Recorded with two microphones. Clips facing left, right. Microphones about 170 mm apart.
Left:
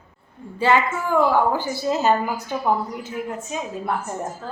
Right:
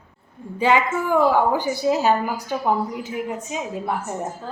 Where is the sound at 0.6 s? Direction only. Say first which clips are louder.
Even; 15° right (ahead or behind).